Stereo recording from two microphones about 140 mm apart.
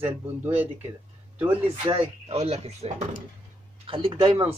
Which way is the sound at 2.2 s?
50° right (ahead or behind).